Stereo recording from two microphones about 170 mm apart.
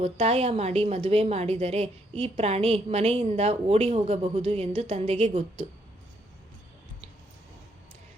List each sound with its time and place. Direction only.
0.0 s a woman's voice: 35° right (ahead or behind)